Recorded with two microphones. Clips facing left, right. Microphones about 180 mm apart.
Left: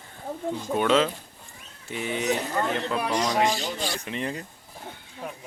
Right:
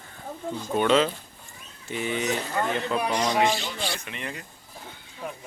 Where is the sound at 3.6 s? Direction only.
40° left (ahead or behind).